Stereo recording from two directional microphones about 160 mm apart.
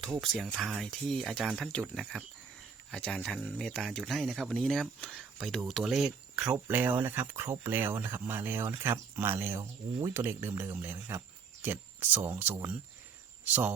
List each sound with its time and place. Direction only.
0.0 s speech: centre (ahead or behind)